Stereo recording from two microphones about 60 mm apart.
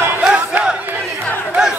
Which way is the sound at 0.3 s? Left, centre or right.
Centre.